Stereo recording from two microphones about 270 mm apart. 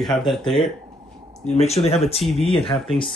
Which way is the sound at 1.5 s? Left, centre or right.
Left.